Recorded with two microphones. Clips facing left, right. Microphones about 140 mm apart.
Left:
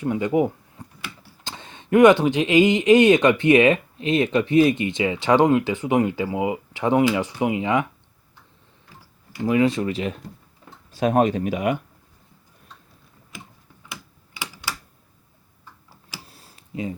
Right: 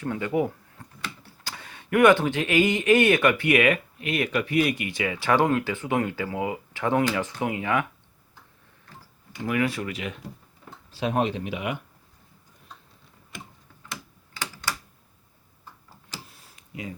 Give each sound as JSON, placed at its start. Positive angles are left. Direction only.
{"t": 0.0, "sound": "speech", "side_deg": 15}
{"t": 8.9, "sound": "typing", "side_deg": 5}
{"t": 9.5, "sound": "speech", "side_deg": 25}
{"t": 10.9, "sound": "speech", "side_deg": 50}
{"t": 16.3, "sound": "tick-tock", "side_deg": 30}